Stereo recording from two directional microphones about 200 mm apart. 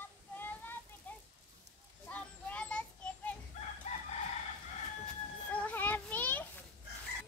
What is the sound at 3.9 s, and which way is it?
Crowing, 30° left (ahead or behind).